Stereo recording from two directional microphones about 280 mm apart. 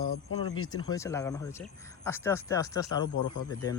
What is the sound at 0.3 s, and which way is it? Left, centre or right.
Speech, left.